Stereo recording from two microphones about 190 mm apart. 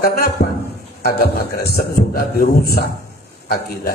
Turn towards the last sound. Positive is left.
turn(degrees=55)  # may be behind; listen again after turning